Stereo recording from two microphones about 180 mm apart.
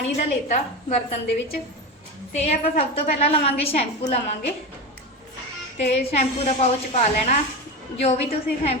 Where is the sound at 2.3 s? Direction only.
40° left (ahead or behind).